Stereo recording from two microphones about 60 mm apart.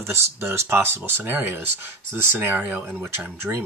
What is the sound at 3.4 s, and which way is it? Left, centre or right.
Speech, centre.